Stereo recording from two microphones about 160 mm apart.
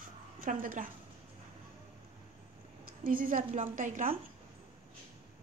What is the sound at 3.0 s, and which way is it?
A woman's voice, 60° right (ahead or behind).